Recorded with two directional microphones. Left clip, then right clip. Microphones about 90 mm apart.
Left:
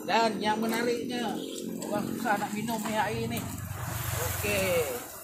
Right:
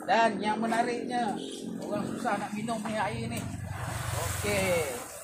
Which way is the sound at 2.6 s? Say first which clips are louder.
Left 1 dB; 5° right (ahead or behind).